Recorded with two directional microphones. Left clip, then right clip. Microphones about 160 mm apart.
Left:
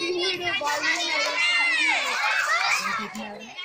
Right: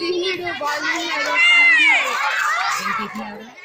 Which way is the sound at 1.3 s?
55° right (ahead or behind).